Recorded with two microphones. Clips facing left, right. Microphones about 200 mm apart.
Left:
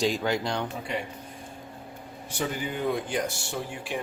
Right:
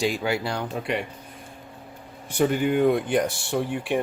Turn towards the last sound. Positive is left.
turn(degrees=-60)  # may be behind; listen again after turning